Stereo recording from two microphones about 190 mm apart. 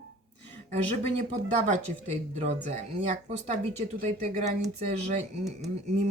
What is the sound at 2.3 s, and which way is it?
Speech, 35° right (ahead or behind).